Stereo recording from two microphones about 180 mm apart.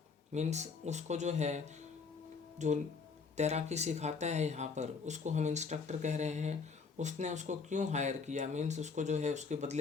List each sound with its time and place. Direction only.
0.3 s speech: 40° right (ahead or behind)